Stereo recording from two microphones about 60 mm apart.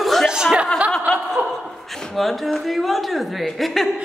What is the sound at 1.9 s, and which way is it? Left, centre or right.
A woman's voice, centre.